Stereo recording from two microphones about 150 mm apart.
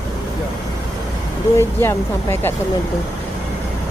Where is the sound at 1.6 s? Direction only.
15° left (ahead or behind).